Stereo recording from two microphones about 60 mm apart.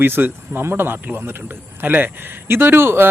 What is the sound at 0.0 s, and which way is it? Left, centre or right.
A man's voice, right.